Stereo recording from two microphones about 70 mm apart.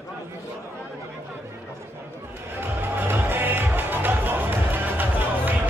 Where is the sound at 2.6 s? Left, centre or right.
Right.